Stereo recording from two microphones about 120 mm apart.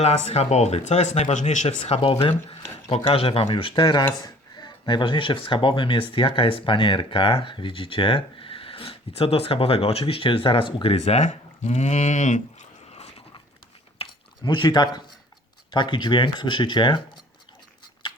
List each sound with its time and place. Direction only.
0.0 s speech: 60° left (ahead or behind)
2.2 s speech: 55° left (ahead or behind)
10.9 s speech: 60° left (ahead or behind)
14.0 s a sound: 40° left (ahead or behind)
15.7 s speech: 40° left (ahead or behind)